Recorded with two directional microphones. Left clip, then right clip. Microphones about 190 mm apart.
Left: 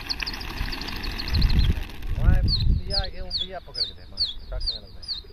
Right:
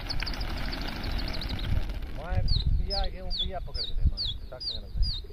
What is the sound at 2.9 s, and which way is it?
Speech, 45° left (ahead or behind).